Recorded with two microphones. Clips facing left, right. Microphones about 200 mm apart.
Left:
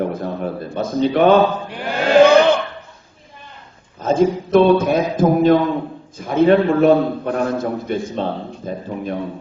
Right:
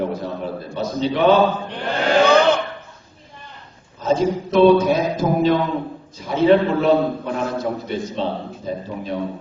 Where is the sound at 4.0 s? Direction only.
50° left (ahead or behind).